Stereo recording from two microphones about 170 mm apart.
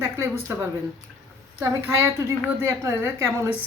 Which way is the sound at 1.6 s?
15° right (ahead or behind).